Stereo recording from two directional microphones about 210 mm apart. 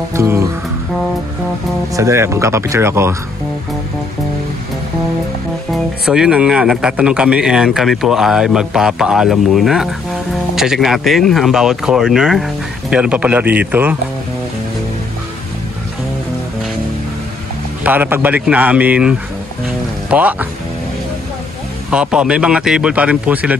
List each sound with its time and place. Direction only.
0.1 s a man's voice: 15° right (ahead or behind)
2.0 s a man's voice: 15° right (ahead or behind)
5.7 s a man's voice: 5° right (ahead or behind)
17.8 s a man's voice: 10° right (ahead or behind)
21.9 s speech: 5° right (ahead or behind)